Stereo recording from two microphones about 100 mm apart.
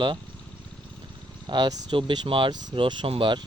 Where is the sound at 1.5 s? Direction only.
50° right (ahead or behind).